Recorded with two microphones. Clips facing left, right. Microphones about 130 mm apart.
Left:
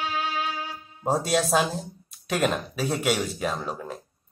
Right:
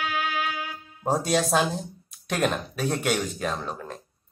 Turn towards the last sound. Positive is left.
turn(degrees=5)  # may be behind; listen again after turning